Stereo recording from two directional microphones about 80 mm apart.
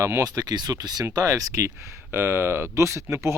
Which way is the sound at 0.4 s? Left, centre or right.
Right.